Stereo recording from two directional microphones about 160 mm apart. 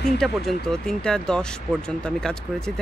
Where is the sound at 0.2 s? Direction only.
Centre (ahead or behind).